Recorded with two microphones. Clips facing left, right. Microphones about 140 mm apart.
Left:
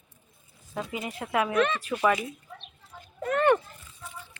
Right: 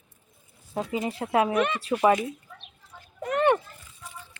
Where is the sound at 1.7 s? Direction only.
30° right (ahead or behind).